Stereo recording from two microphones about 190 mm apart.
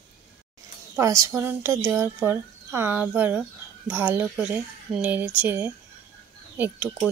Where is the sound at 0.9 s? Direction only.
15° right (ahead or behind).